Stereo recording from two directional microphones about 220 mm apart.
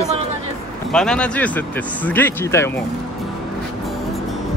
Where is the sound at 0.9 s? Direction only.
5° left (ahead or behind).